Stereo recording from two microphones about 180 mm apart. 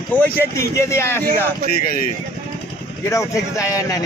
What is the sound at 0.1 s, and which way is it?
Speech, 10° left (ahead or behind).